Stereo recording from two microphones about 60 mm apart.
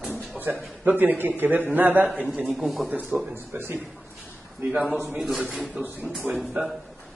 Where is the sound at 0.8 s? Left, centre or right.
Right.